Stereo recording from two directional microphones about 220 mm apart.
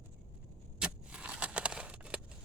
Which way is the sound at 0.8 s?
5° right (ahead or behind).